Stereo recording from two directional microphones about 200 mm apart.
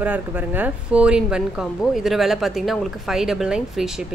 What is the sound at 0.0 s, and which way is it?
A woman's voice, 10° right (ahead or behind).